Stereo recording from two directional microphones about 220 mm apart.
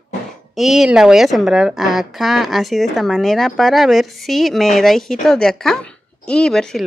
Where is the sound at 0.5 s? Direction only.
Centre (ahead or behind).